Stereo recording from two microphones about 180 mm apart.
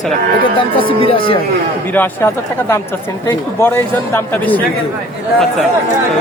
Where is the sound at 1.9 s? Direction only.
10° left (ahead or behind).